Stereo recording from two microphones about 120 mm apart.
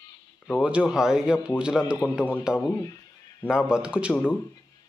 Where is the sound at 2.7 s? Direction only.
25° left (ahead or behind).